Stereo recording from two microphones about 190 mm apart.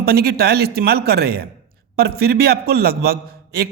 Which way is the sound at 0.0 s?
55° right (ahead or behind).